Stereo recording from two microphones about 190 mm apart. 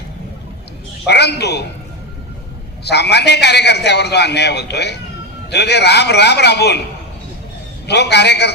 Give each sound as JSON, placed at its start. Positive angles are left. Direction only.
{"t": 1.0, "sound": "a man's voice", "side_deg": 60}
{"t": 2.8, "sound": "a man's voice", "side_deg": 60}
{"t": 7.9, "sound": "a man's voice", "side_deg": 60}